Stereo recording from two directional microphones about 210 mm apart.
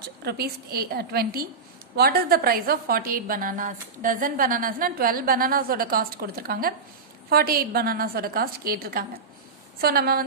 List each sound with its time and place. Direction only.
0.2 s a woman's voice: 50° right (ahead or behind)